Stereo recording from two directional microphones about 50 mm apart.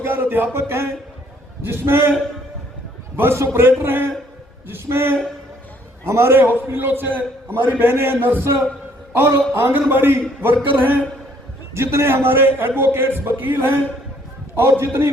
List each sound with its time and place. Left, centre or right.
0.0 s a sound: right
0.5 s a man's voice: right
3.2 s a man's voice: right
3.7 s a man's voice: right
9.5 s a man's voice: right
11.7 s a man's voice: right
12.2 s a man's voice: right